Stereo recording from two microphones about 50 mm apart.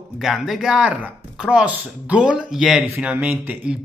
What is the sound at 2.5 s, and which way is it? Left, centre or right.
Speech, centre.